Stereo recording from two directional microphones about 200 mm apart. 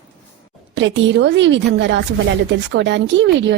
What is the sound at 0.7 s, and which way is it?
Speech, 65° right (ahead or behind).